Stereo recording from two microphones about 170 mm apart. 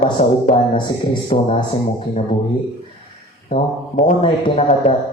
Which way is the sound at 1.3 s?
50° left (ahead or behind).